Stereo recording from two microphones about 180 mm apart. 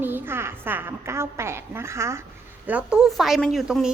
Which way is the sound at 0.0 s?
10° right (ahead or behind).